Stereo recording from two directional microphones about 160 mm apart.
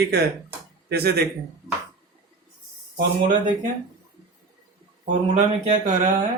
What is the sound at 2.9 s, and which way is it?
Speech, 55° right (ahead or behind).